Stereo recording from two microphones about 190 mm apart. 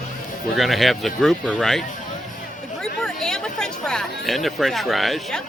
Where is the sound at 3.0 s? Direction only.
5° left (ahead or behind).